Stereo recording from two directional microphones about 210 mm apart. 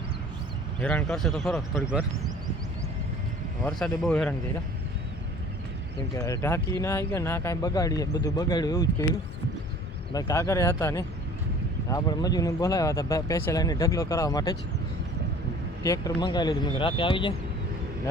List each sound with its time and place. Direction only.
0.8 s a man's voice: 5° left (ahead or behind)
3.6 s a man's voice: 5° left (ahead or behind)
6.1 s speech: 15° left (ahead or behind)
10.1 s speech: 15° left (ahead or behind)
15.8 s speech: 15° left (ahead or behind)